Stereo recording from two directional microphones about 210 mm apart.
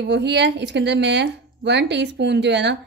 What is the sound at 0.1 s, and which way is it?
Speech, 55° right (ahead or behind).